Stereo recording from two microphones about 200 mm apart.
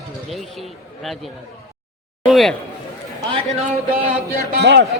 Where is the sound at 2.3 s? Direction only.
Centre (ahead or behind).